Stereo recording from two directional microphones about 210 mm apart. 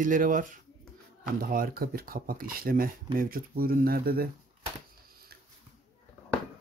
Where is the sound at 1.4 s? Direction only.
45° right (ahead or behind).